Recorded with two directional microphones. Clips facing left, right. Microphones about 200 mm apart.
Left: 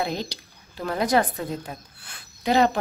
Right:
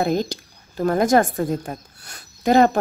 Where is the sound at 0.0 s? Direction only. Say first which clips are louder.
Right 7 dB; 45° right (ahead or behind).